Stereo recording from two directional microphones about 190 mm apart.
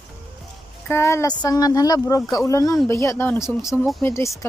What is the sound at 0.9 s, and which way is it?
Speech, 15° left (ahead or behind).